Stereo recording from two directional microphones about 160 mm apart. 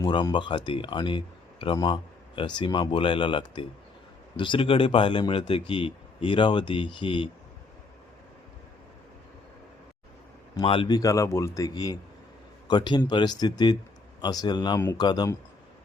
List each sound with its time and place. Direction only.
0.0 s speech: 30° left (ahead or behind)
10.5 s a man's voice: 30° left (ahead or behind)